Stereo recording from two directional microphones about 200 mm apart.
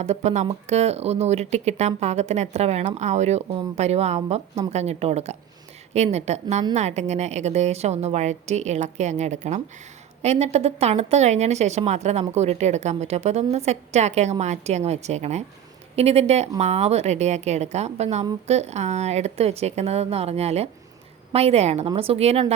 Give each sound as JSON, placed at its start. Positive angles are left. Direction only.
{"t": 0.0, "sound": "speech", "side_deg": -35}